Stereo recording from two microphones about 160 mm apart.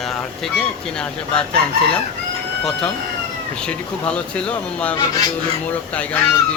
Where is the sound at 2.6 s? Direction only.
5° left (ahead or behind).